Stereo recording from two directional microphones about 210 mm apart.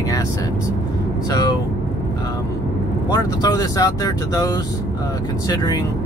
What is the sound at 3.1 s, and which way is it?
Speech, 20° left (ahead or behind).